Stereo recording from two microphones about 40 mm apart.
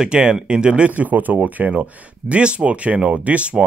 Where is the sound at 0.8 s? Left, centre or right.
Right.